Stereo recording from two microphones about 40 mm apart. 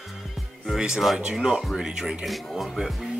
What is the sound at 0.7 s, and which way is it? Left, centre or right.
Speech, centre.